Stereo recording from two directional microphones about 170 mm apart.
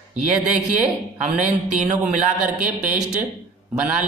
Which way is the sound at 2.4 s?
10° right (ahead or behind).